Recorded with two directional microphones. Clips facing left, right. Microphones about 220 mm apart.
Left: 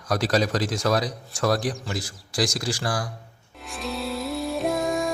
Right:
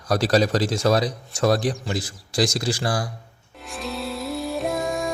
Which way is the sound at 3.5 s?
Centre (ahead or behind).